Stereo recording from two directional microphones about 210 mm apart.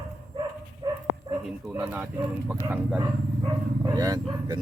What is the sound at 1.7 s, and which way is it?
Speech, 10° right (ahead or behind).